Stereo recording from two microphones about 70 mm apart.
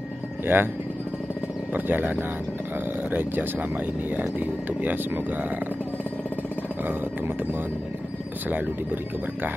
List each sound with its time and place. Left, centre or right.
0.5 s speech: right
1.7 s speech: right